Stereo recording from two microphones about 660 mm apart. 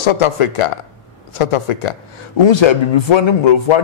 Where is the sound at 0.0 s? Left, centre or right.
Left.